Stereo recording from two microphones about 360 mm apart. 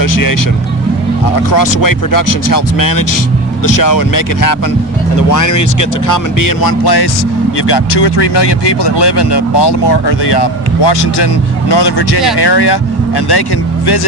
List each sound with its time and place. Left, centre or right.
0.0 s speech: left
1.5 s speech: left
6.1 s music: left
7.7 s speech: left